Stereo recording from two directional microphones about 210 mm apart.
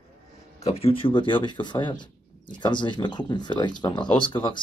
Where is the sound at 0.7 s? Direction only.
30° left (ahead or behind).